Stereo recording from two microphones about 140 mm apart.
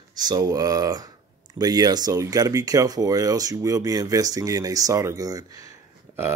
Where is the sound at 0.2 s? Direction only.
30° right (ahead or behind).